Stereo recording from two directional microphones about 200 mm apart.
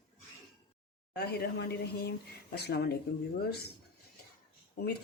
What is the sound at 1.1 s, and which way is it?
Speech, 55° left (ahead or behind).